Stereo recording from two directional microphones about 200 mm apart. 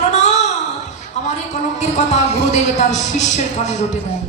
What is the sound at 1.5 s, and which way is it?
Speech, 35° left (ahead or behind).